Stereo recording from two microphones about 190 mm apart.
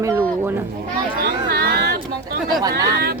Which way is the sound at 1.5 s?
50° right (ahead or behind).